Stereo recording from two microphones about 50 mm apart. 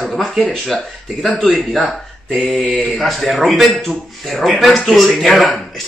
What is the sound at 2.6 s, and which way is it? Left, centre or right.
A man's voice, centre.